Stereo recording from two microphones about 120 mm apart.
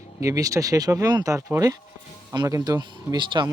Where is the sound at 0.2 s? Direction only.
25° right (ahead or behind).